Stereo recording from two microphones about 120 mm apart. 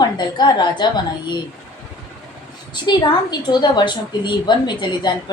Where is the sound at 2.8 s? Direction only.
40° left (ahead or behind).